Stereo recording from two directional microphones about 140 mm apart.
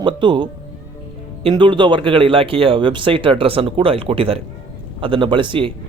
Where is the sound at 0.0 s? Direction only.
35° right (ahead or behind).